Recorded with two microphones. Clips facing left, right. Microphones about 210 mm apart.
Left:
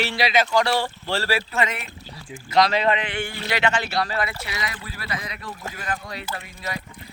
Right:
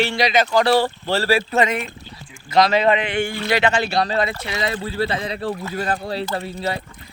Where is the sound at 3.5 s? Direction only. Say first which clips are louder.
Right 5 dB; 40° right (ahead or behind).